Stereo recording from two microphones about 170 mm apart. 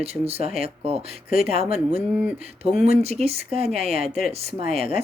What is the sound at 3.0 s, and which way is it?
Speech, 40° right (ahead or behind).